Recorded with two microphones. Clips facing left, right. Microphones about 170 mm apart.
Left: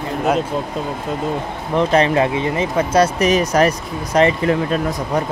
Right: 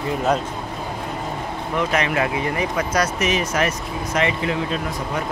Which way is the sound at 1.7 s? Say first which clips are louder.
Left 7 dB; 30° left (ahead or behind).